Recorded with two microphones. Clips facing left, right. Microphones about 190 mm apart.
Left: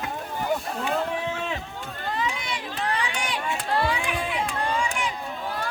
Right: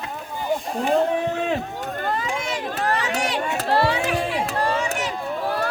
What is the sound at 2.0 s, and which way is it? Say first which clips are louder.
Crowd: right 3 dB; 45° right (ahead or behind).